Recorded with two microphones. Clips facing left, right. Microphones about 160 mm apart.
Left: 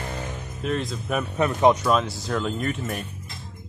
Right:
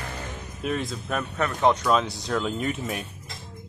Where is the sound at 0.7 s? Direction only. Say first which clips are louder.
Left 2 dB; centre (ahead or behind).